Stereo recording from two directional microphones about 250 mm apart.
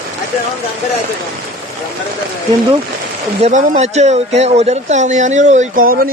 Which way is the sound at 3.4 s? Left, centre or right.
Right.